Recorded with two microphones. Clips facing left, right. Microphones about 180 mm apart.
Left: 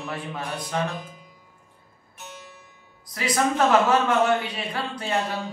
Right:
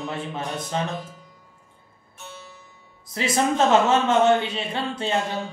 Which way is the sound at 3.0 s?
25° right (ahead or behind).